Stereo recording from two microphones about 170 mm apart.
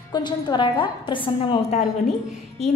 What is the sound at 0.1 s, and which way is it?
A woman's voice, 25° left (ahead or behind).